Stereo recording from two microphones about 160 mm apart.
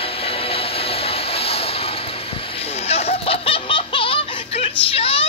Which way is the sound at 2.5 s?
40° left (ahead or behind).